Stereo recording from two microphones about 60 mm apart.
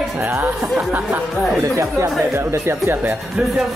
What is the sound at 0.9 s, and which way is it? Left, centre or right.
Speech, right.